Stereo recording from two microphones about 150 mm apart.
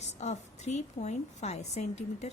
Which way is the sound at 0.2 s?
50° left (ahead or behind).